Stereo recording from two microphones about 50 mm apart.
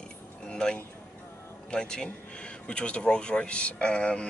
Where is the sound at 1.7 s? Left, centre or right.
Centre.